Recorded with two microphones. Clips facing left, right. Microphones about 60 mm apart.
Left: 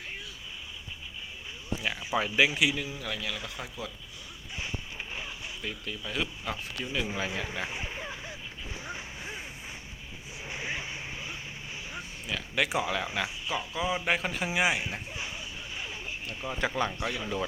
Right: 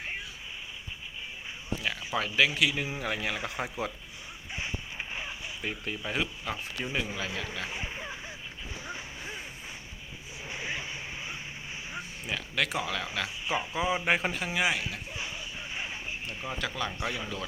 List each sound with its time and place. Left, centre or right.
1.8 s speech: centre
2.9 s speech: right
4.5 s a sound: centre
5.8 s speech: right
6.5 s speech: centre
7.8 s a sound: centre
10.5 s vehicle: centre
12.5 s speech: centre
13.5 s speech: centre
14.3 s speech: centre
15.7 s a sound: centre
16.6 s speech: left
17.0 s speech: centre